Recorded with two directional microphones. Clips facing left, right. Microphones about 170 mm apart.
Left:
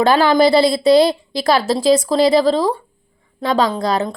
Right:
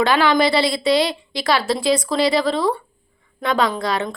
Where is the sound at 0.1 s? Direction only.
35° left (ahead or behind).